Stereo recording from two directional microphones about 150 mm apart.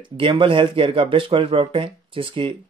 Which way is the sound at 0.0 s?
35° right (ahead or behind).